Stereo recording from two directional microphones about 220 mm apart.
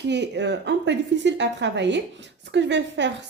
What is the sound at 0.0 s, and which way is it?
Speech, 50° right (ahead or behind).